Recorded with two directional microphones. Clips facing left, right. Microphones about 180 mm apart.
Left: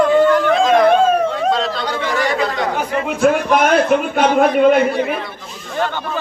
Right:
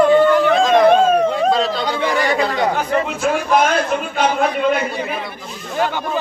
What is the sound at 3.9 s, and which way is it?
Speech, 55° left (ahead or behind).